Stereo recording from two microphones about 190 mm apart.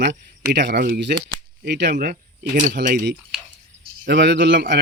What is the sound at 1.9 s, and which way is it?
Speech, 45° right (ahead or behind).